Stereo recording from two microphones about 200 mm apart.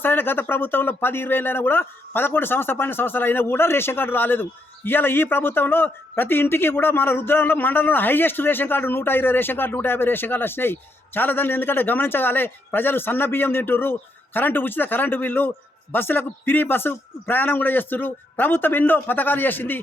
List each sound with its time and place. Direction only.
0.0 s speech: 10° left (ahead or behind)